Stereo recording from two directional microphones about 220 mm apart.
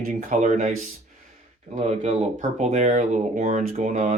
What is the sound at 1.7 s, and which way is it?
Speech, 30° right (ahead or behind).